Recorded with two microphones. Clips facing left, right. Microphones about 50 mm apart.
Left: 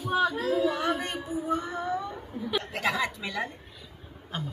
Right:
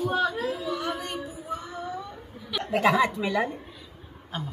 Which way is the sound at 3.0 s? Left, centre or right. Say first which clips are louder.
Right 6 dB; right.